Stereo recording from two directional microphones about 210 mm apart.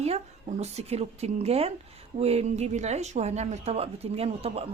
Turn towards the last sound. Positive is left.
turn(degrees=-30)  # may be behind; listen again after turning